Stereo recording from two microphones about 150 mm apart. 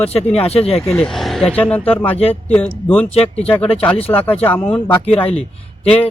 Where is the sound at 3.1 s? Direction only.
40° left (ahead or behind).